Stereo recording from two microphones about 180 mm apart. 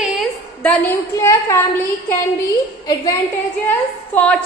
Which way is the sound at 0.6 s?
15° left (ahead or behind).